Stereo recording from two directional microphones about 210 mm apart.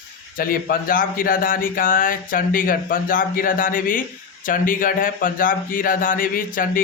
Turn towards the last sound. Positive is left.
turn(degrees=40)  # may be behind; listen again after turning